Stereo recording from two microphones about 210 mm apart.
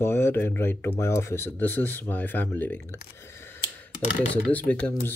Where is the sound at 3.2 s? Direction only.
10° left (ahead or behind).